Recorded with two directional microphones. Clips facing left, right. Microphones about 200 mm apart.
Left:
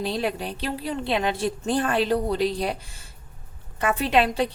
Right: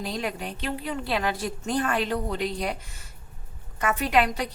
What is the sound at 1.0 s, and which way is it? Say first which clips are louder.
A woman's voice: left 4 dB; 25° left (ahead or behind).